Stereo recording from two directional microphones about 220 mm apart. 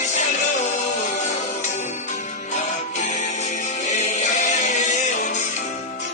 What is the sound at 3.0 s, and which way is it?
Music, 35° left (ahead or behind).